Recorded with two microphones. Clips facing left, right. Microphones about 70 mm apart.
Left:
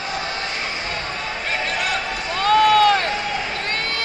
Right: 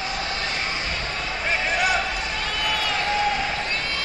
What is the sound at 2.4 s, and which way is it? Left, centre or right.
Run, left.